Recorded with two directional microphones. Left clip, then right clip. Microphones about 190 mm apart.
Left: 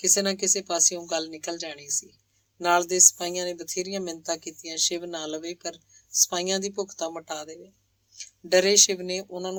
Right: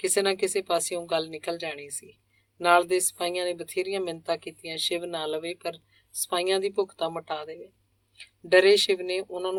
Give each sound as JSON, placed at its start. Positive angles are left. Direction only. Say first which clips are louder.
{"t": 0.0, "sound": "speech", "louder": "even", "side_deg": 45}